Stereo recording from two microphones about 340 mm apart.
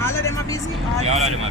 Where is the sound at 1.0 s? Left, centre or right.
Centre.